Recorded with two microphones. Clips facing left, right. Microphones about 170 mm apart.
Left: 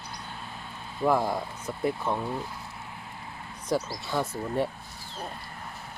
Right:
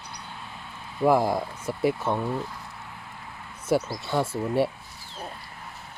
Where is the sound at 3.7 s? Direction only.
30° right (ahead or behind).